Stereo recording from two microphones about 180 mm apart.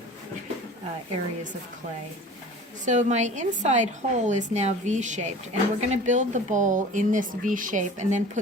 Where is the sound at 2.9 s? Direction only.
40° right (ahead or behind).